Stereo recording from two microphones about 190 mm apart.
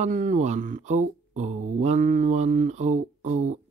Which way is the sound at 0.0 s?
45° right (ahead or behind).